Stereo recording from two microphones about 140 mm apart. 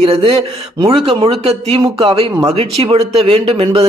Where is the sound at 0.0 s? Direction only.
40° right (ahead or behind).